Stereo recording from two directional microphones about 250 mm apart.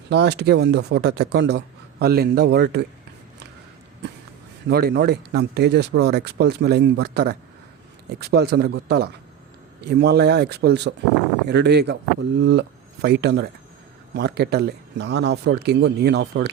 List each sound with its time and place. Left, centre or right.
0.1 s speech: right
4.7 s speech: right